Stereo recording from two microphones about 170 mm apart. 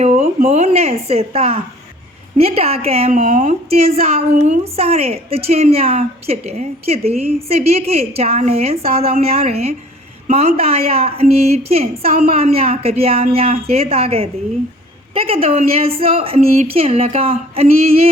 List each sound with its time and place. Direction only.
0.0 s a woman's voice: 40° right (ahead or behind)